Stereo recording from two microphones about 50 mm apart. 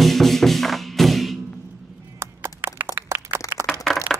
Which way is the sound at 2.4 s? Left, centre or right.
Right.